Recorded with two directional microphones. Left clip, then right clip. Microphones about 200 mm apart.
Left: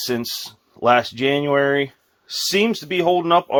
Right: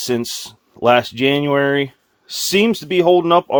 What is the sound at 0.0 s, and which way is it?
Speech, 45° right (ahead or behind).